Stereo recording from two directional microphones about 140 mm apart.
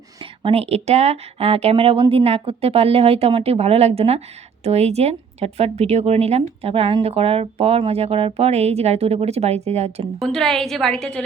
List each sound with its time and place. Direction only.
0.2 s speech: 40° right (ahead or behind)
10.2 s a woman's voice: 5° left (ahead or behind)